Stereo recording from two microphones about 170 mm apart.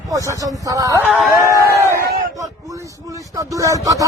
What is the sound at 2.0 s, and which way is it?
Speech, 65° right (ahead or behind).